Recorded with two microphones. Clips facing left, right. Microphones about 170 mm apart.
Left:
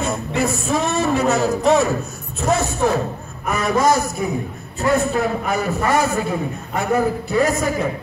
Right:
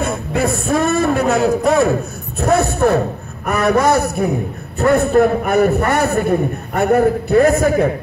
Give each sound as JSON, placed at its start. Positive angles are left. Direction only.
{"t": 0.0, "sound": "a man's voice", "side_deg": -55}